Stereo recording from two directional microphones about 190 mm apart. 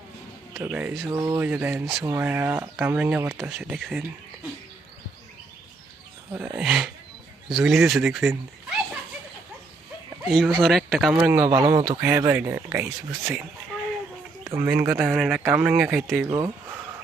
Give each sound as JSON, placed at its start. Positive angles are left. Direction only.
{"t": 0.6, "sound": "speech", "side_deg": -5}
{"t": 1.2, "sound": "speech", "side_deg": -15}
{"t": 6.6, "sound": "a sound", "side_deg": -5}
{"t": 7.4, "sound": "speech", "side_deg": -5}
{"t": 10.2, "sound": "speech", "side_deg": 5}
{"t": 11.1, "sound": "speech", "side_deg": -15}
{"t": 14.4, "sound": "a sound", "side_deg": -15}
{"t": 14.7, "sound": "speech", "side_deg": -10}
{"t": 16.2, "sound": "speech", "side_deg": -20}